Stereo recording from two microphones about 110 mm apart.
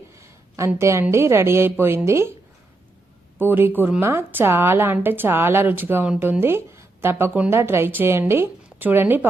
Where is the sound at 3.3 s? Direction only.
20° right (ahead or behind).